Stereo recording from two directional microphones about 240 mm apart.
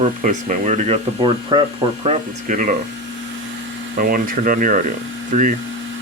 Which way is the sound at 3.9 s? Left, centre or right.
Right.